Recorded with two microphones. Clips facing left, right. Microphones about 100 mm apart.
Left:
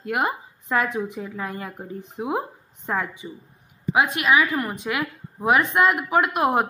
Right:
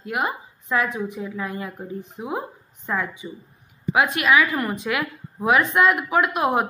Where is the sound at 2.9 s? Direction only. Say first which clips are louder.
Even; 40° left (ahead or behind).